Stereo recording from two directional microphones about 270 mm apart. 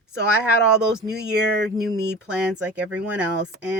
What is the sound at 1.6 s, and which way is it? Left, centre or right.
Speech, right.